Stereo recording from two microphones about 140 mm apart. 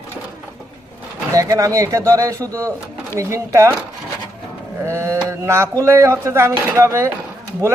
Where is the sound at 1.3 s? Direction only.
25° right (ahead or behind).